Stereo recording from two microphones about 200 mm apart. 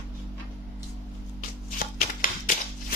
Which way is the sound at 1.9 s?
45° left (ahead or behind).